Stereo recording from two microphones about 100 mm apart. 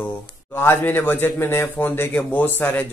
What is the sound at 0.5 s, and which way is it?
Speech, 20° left (ahead or behind).